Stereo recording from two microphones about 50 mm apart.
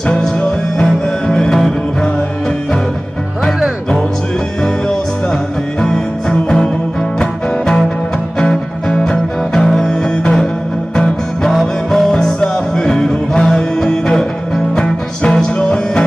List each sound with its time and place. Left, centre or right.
0.0 s music: centre
7.2 s music: centre
11.6 s music: centre